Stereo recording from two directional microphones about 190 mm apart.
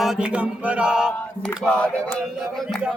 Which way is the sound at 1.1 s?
10° left (ahead or behind).